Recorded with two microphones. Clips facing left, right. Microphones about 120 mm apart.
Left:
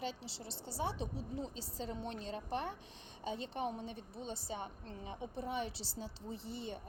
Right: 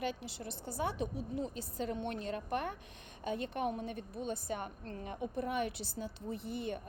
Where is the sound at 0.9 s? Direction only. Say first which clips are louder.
Right 4 dB; 30° left (ahead or behind).